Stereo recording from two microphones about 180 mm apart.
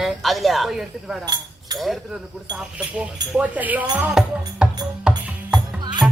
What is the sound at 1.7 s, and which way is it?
Speech, centre (ahead or behind).